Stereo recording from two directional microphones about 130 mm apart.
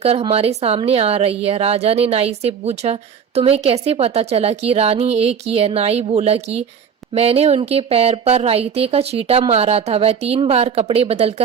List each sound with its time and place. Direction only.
0.0 s a woman's voice: 50° right (ahead or behind)